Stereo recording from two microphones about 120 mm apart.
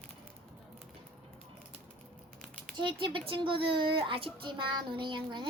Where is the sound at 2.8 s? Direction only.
45° right (ahead or behind).